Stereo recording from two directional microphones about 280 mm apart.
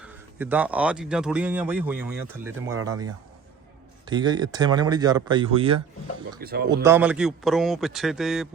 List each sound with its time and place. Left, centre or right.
0.0 s speech: centre
6.4 s speech: right
6.8 s a man's voice: centre